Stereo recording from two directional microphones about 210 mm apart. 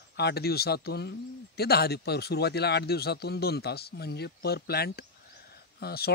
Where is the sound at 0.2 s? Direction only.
50° left (ahead or behind).